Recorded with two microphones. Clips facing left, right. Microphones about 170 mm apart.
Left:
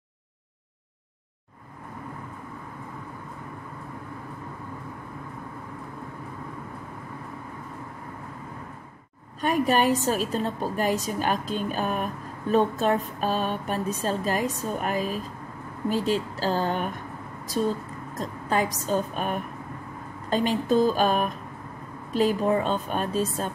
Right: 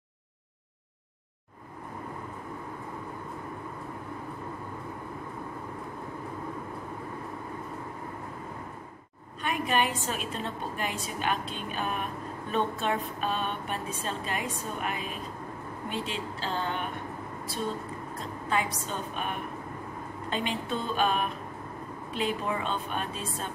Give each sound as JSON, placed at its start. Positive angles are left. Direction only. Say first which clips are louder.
{"t": 9.4, "sound": "a woman's voice", "louder": "left 6 dB", "side_deg": 40}
{"t": 18.1, "sound": "a woman's voice", "louder": "left 4 dB", "side_deg": 40}